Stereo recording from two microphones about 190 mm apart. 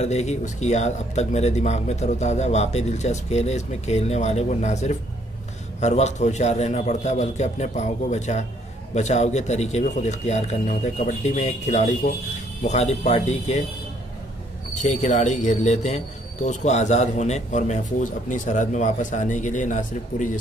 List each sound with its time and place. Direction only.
0.0 s speech: 35° left (ahead or behind)
14.8 s speech: 40° left (ahead or behind)